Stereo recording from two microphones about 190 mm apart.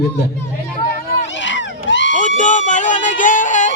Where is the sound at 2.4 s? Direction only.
40° left (ahead or behind).